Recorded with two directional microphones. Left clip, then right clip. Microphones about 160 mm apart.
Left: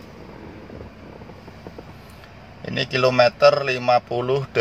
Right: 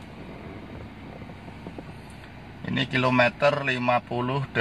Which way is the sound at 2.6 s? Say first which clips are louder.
Left 5 dB; 20° left (ahead or behind).